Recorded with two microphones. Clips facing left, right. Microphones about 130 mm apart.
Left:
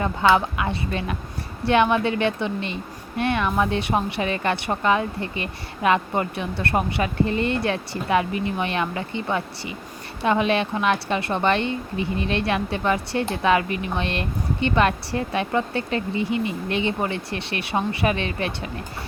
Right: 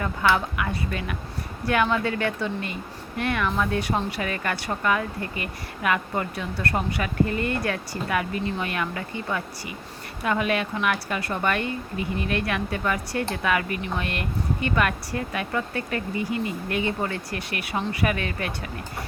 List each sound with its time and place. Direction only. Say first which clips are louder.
0.0 s a woman's voice: left 4 dB; 20° left (ahead or behind)